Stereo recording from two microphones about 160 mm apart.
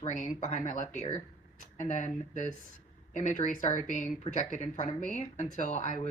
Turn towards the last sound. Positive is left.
turn(degrees=50)  # may be behind; listen again after turning